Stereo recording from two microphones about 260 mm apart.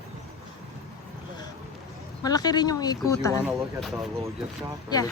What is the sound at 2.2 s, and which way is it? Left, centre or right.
Speech, centre.